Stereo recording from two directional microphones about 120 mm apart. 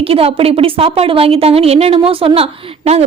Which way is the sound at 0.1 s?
50° right (ahead or behind).